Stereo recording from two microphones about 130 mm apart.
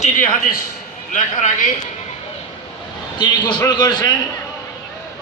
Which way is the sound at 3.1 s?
35° left (ahead or behind).